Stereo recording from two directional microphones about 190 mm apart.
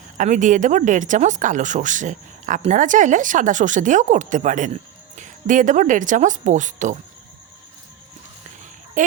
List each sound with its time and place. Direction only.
0.2 s speech: 40° right (ahead or behind)
9.0 s speech: 40° right (ahead or behind)